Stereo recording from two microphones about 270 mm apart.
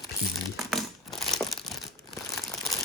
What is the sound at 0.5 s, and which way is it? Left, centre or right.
Crumpling, centre.